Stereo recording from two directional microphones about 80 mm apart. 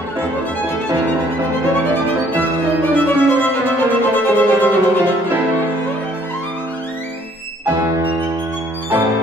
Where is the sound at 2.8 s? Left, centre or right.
Left.